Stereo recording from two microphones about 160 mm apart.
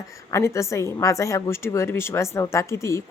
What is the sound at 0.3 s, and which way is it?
A woman's voice, 15° left (ahead or behind).